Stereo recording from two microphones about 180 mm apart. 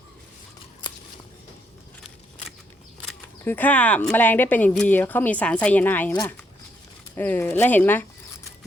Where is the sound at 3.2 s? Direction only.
10° left (ahead or behind).